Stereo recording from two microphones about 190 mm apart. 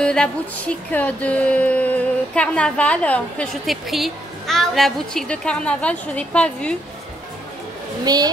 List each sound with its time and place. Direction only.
0.0 s music: 5° left (ahead or behind)
8.0 s speech: 20° right (ahead or behind)